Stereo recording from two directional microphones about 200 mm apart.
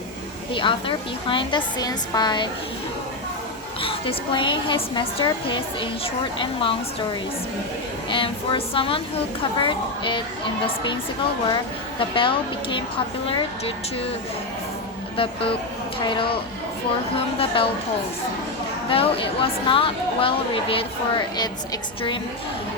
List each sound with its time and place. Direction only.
0.5 s speech: 25° left (ahead or behind)
3.8 s speech: 25° left (ahead or behind)
8.1 s speech: 25° left (ahead or behind)
11.9 s speech: 25° left (ahead or behind)
15.1 s speech: 25° left (ahead or behind)
18.9 s speech: 30° left (ahead or behind)